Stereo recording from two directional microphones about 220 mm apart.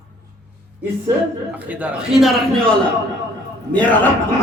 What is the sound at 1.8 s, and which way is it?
A man's voice, centre (ahead or behind).